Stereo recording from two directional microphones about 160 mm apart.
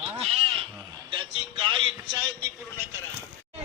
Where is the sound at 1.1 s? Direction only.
30° right (ahead or behind).